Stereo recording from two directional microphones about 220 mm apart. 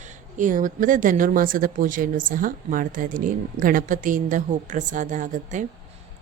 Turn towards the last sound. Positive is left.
turn(degrees=-35)  # may be behind; listen again after turning